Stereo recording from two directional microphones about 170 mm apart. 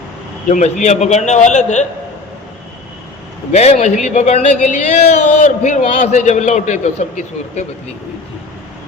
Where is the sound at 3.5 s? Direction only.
40° left (ahead or behind).